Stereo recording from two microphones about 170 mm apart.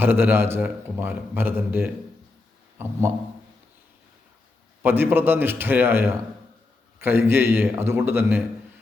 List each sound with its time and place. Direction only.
0.0 s a man's voice: 10° right (ahead or behind)
4.8 s a man's voice: 10° right (ahead or behind)